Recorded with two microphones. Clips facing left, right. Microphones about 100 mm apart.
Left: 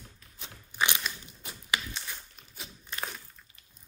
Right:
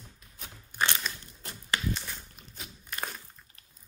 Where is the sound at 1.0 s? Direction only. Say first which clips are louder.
Even; 10° left (ahead or behind).